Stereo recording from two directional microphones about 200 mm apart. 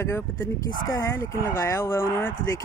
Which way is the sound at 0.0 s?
15° left (ahead or behind).